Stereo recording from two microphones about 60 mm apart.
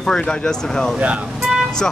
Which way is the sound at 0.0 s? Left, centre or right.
Centre.